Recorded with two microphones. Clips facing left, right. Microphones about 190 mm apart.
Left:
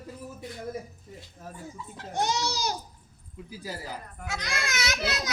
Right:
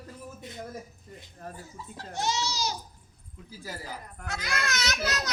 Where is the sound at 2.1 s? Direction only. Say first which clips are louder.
Left 2 dB; 55° left (ahead or behind).